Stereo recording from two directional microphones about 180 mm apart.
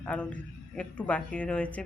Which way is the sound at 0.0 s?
10° left (ahead or behind).